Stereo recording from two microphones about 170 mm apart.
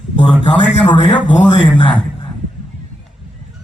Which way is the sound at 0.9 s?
30° left (ahead or behind).